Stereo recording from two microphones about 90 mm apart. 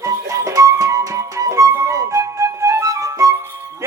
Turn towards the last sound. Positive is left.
turn(degrees=-35)  # may be behind; listen again after turning